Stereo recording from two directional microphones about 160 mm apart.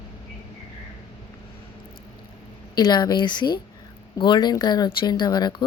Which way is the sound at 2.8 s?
25° left (ahead or behind).